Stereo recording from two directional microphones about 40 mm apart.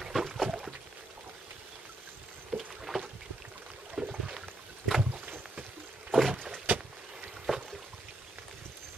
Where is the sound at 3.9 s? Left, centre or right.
Centre.